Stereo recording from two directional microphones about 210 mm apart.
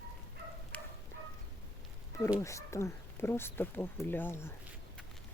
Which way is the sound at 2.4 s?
15° left (ahead or behind).